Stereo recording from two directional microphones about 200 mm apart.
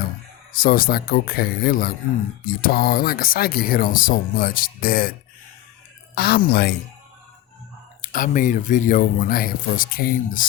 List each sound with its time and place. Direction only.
0.5 s speech: 45° left (ahead or behind)
6.1 s speech: 50° left (ahead or behind)
8.0 s speech: 40° left (ahead or behind)